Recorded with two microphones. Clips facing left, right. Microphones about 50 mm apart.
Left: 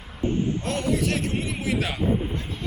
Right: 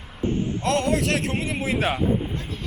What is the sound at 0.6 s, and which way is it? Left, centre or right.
Speech, right.